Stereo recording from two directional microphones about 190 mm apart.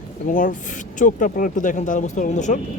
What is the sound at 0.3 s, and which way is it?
Speech, 45° left (ahead or behind).